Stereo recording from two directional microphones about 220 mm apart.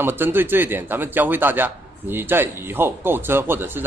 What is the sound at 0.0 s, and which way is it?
Speech, 10° right (ahead or behind).